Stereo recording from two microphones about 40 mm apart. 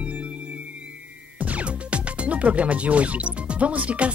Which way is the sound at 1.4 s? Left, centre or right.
Right.